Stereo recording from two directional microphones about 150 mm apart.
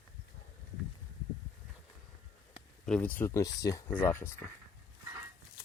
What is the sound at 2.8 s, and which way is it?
Speech, 5° left (ahead or behind).